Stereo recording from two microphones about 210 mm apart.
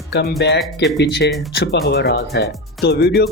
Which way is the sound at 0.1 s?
50° left (ahead or behind).